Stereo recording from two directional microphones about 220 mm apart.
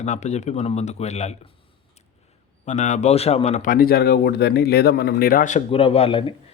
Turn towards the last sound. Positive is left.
turn(degrees=25)  # may be behind; listen again after turning